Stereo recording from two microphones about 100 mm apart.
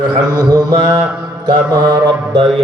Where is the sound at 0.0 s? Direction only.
45° right (ahead or behind).